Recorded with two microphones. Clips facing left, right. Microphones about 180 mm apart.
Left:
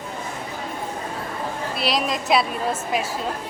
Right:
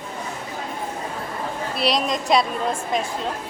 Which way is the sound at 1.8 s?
Centre (ahead or behind).